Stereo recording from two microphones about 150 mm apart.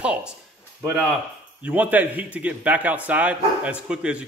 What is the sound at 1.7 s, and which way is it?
Speech, 10° right (ahead or behind).